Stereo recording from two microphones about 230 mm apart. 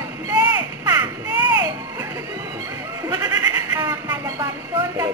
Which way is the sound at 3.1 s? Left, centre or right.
Centre.